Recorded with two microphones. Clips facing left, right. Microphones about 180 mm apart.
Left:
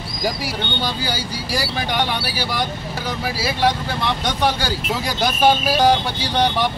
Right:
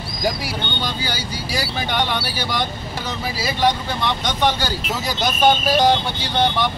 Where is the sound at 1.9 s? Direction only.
10° left (ahead or behind).